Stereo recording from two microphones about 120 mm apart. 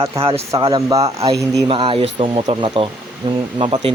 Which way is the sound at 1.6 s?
40° right (ahead or behind).